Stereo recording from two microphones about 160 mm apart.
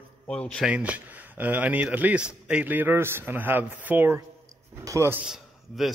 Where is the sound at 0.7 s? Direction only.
10° right (ahead or behind).